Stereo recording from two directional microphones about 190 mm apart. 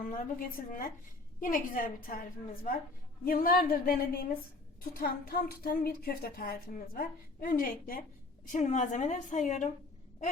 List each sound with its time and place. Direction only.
0.1 s speech: 45° left (ahead or behind)
3.2 s a woman's voice: 50° left (ahead or behind)